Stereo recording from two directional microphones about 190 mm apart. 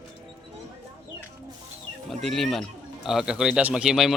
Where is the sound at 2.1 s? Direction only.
Centre (ahead or behind).